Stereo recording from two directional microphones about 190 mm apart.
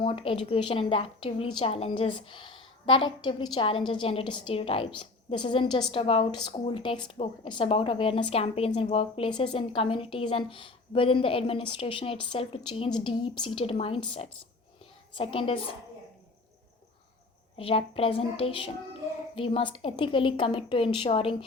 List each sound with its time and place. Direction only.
0.0 s a woman's voice: 25° left (ahead or behind)
17.6 s a woman's voice: 30° left (ahead or behind)